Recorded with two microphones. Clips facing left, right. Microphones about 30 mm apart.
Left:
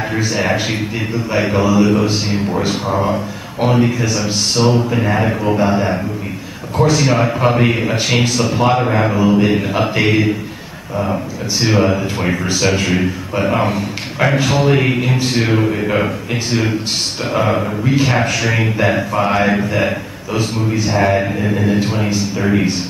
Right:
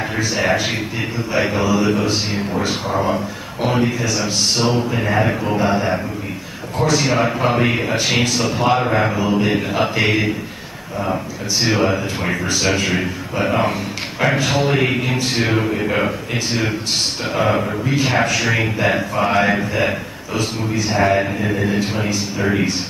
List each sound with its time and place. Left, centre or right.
0.1 s speech: centre
7.0 s speech: centre
11.6 s speech: centre
17.3 s speech: centre